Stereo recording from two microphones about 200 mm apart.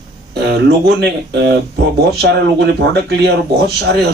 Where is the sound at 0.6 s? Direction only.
55° right (ahead or behind).